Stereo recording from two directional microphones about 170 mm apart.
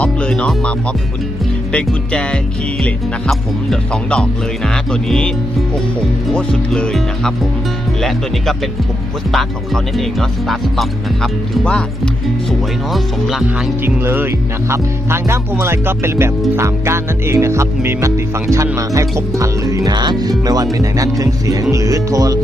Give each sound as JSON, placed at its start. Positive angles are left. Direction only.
{"t": 0.0, "sound": "music", "side_deg": 5}
{"t": 1.7, "sound": "speech", "side_deg": 5}
{"t": 9.3, "sound": "speech", "side_deg": 0}
{"t": 13.8, "sound": "music", "side_deg": -10}
{"t": 20.7, "sound": "speech", "side_deg": -20}